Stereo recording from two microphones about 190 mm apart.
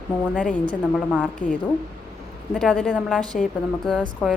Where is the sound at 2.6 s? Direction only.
5° left (ahead or behind).